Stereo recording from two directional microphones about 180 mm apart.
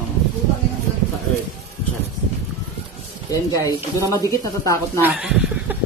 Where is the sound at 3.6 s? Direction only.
15° left (ahead or behind).